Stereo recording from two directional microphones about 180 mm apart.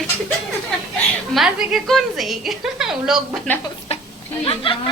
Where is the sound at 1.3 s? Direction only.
Centre (ahead or behind).